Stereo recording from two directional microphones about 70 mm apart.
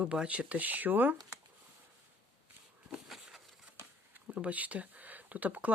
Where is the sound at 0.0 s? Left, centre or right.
Centre.